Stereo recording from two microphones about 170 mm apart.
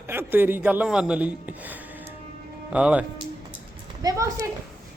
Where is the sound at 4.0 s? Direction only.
20° right (ahead or behind).